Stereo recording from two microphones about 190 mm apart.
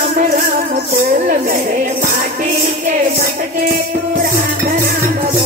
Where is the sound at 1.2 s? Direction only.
45° right (ahead or behind).